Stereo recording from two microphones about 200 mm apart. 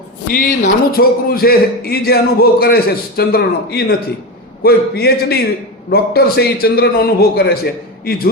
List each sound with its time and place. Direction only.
0.3 s speech: 45° left (ahead or behind)